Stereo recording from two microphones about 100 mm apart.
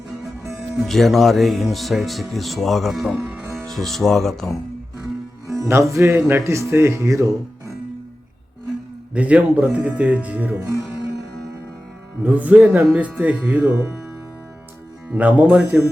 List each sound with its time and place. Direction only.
0.9 s speech: 5° left (ahead or behind)
5.5 s speech: 30° right (ahead or behind)
9.1 s speech: 15° right (ahead or behind)
12.2 s speech: 15° right (ahead or behind)
15.1 s speech: 15° right (ahead or behind)